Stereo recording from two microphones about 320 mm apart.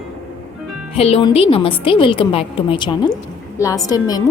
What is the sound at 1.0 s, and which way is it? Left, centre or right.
A woman's voice, centre.